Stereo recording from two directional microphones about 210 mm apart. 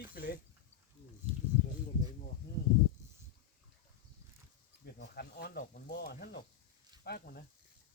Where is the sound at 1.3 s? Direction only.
25° right (ahead or behind).